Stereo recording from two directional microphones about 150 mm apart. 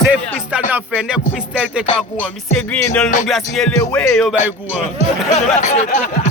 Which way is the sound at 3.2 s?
Centre (ahead or behind).